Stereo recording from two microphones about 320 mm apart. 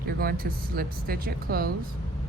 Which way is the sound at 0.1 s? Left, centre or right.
Right.